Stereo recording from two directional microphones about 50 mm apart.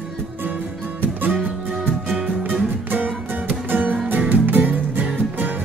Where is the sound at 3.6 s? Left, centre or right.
Right.